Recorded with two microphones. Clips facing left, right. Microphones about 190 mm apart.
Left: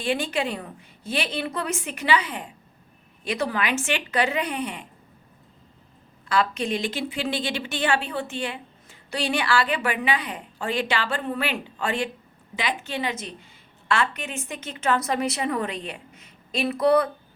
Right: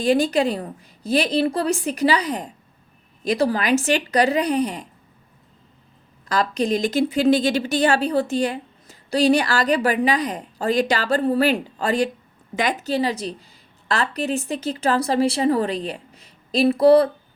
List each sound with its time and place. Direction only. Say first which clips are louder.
0.0 s speech: right 7 dB; 40° right (ahead or behind)
6.2 s speech: right 3 dB; 40° right (ahead or behind)